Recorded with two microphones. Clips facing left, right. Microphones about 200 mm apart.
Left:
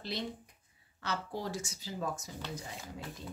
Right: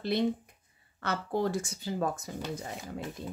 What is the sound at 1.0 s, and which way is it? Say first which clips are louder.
Speech: right 7 dB; 55° right (ahead or behind).